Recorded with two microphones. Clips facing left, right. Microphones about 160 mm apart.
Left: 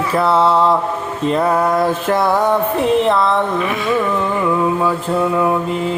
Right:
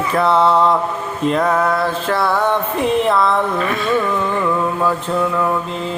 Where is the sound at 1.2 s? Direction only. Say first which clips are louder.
Left 1 dB; 5° left (ahead or behind).